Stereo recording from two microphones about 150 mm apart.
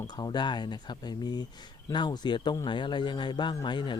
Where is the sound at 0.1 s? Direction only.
25° left (ahead or behind).